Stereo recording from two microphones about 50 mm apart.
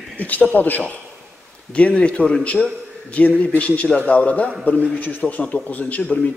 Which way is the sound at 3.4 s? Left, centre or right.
Left.